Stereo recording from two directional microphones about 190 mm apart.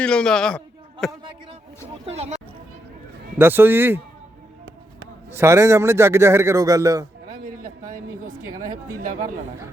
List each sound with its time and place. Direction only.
0.0 s a man's voice: 5° left (ahead or behind)
2.0 s speech: 35° right (ahead or behind)
3.3 s a man's voice: 10° right (ahead or behind)
5.3 s a man's voice: 15° right (ahead or behind)
7.3 s a sound: 50° right (ahead or behind)